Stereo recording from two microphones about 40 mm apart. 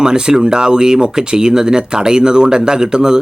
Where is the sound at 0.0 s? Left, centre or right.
Centre.